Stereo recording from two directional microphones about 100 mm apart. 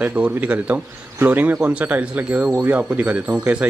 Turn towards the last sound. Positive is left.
turn(degrees=-10)  # may be behind; listen again after turning